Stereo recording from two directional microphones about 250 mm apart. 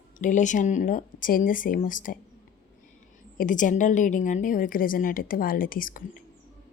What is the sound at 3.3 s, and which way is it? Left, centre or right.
Speech, left.